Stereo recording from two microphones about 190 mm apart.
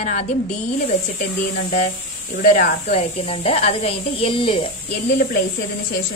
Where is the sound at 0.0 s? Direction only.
40° left (ahead or behind).